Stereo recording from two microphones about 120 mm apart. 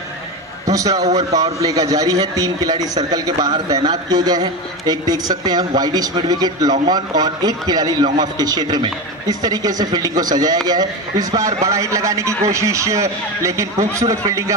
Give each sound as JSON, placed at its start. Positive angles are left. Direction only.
{"t": 0.7, "sound": "a man's voice", "side_deg": -30}